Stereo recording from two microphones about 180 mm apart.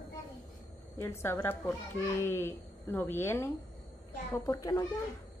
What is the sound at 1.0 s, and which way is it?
A child's voice, 15° left (ahead or behind).